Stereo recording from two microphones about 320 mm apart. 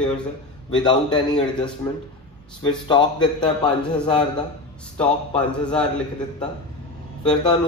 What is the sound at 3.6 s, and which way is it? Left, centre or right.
A man's voice, centre.